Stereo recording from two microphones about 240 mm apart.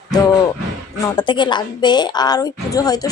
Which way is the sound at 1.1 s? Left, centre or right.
Centre.